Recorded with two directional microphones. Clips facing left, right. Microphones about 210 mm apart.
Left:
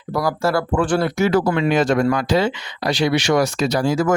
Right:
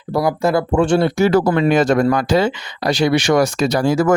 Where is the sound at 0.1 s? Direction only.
25° right (ahead or behind).